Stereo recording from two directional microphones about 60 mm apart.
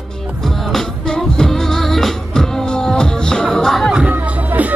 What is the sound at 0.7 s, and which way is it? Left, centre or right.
Music, centre.